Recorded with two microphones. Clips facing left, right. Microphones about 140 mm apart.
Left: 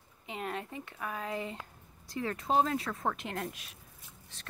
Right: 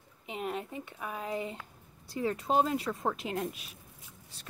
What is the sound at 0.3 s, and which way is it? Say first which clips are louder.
Speech: right 2 dB; 5° right (ahead or behind).